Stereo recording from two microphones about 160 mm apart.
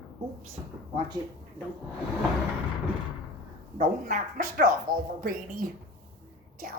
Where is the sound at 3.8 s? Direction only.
60° right (ahead or behind).